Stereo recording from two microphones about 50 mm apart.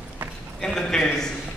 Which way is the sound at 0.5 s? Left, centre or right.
Centre.